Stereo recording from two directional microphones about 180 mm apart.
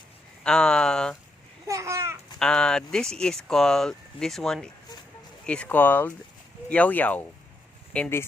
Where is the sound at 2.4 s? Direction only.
5° left (ahead or behind).